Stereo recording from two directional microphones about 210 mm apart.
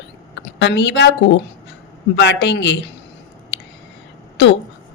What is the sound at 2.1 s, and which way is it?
Speech, 55° left (ahead or behind).